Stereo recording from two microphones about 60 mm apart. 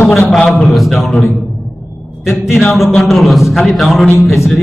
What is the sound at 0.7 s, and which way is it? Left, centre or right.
Speech, centre.